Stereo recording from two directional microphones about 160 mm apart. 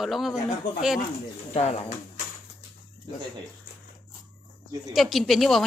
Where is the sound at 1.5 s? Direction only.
40° left (ahead or behind).